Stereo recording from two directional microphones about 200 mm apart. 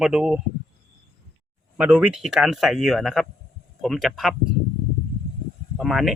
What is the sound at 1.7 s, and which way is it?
Speech, 10° right (ahead or behind).